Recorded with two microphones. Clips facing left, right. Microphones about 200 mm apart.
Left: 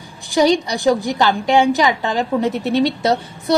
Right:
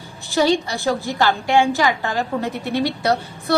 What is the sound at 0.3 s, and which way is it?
A woman's voice, 15° left (ahead or behind).